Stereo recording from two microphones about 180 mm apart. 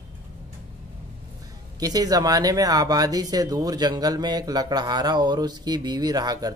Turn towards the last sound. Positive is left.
turn(degrees=-20)  # may be behind; listen again after turning